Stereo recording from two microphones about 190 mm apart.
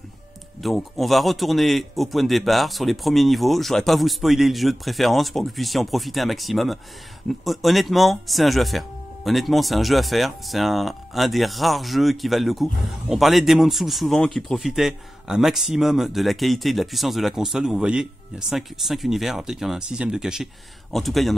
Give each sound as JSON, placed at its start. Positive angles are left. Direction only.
{"t": 0.6, "sound": "speech", "side_deg": 0}